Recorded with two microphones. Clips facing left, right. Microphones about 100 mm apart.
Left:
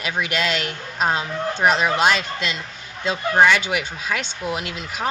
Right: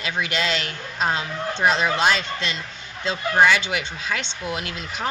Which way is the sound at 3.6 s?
15° left (ahead or behind).